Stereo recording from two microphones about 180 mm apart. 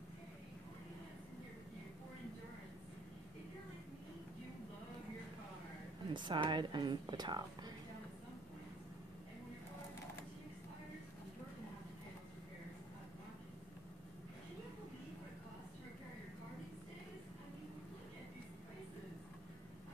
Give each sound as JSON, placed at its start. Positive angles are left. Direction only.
{"t": 6.1, "sound": "a woman's voice", "side_deg": -25}